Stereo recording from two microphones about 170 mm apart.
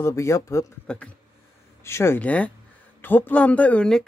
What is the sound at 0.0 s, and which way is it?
Speech, 15° left (ahead or behind).